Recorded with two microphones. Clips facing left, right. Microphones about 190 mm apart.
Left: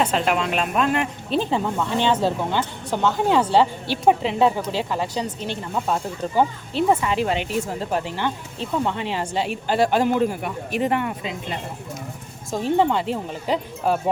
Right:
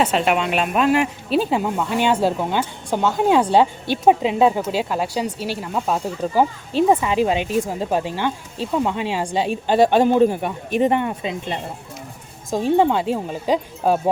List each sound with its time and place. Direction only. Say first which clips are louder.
0.0 s speech: right 2 dB; 5° right (ahead or behind); by 11.1 s 20° right (ahead or behind)
12.5 s speech: right 3 dB; 15° right (ahead or behind)